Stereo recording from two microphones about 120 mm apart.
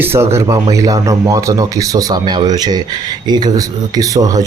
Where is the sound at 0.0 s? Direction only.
20° right (ahead or behind).